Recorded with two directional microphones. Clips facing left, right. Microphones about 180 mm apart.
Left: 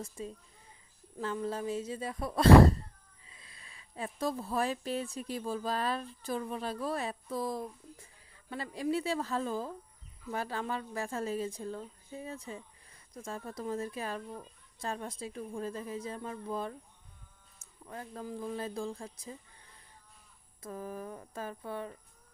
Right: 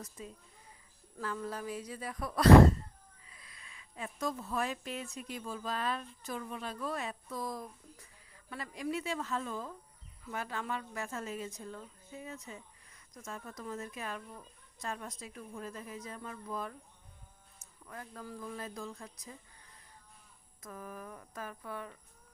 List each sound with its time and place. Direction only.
0.2 s a woman's voice: 30° left (ahead or behind)
17.8 s speech: 25° left (ahead or behind)
20.6 s speech: 30° left (ahead or behind)